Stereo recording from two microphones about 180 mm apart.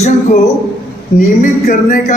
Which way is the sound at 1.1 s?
45° left (ahead or behind).